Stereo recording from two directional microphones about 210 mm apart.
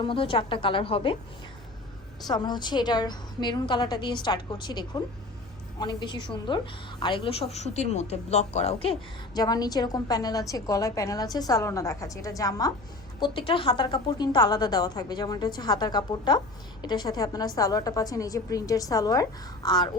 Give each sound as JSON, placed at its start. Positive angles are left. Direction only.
{"t": 0.0, "sound": "a woman's voice", "side_deg": 25}
{"t": 2.2, "sound": "a woman's voice", "side_deg": 20}